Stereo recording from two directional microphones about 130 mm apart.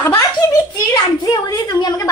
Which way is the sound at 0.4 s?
20° left (ahead or behind).